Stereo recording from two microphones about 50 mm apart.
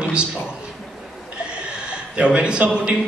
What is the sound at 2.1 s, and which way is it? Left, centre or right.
Speech, right.